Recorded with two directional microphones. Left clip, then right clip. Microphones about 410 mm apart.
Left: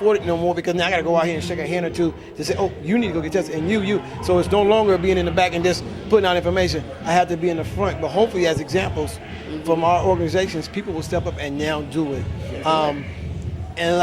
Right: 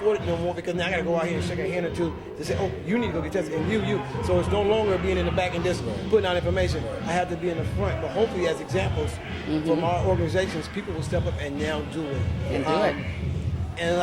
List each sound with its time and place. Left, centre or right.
0.1 s a man's voice: left